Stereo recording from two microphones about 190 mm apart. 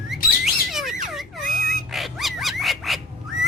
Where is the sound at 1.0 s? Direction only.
Centre (ahead or behind).